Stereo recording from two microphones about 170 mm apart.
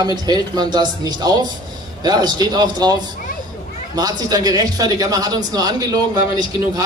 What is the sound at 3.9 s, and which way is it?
Speech, 25° right (ahead or behind).